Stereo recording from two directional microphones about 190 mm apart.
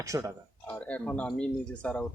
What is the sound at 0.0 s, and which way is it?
Speech, 15° right (ahead or behind).